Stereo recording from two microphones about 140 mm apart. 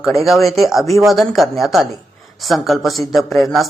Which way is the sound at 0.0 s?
Centre (ahead or behind).